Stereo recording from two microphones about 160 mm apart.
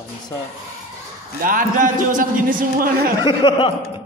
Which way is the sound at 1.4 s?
55° right (ahead or behind).